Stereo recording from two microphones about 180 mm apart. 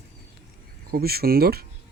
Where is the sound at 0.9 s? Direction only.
60° right (ahead or behind).